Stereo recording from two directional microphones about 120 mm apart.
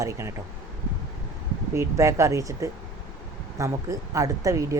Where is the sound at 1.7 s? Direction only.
25° right (ahead or behind).